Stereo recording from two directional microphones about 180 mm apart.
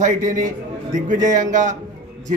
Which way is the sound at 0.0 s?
45° right (ahead or behind).